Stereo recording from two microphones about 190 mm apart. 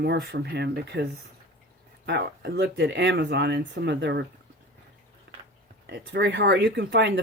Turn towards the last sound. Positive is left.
turn(degrees=-65)  # may be behind; listen again after turning